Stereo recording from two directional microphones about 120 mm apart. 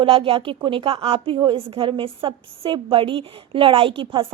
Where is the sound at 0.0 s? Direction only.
50° right (ahead or behind).